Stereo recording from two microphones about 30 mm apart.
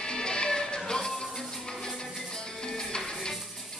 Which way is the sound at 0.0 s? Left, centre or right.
Left.